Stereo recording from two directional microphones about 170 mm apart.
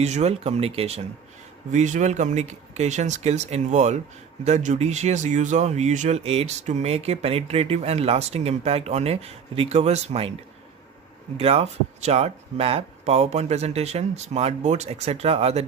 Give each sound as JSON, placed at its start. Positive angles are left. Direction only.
{"t": 0.0, "sound": "speech", "side_deg": -40}
{"t": 11.3, "sound": "speech", "side_deg": -35}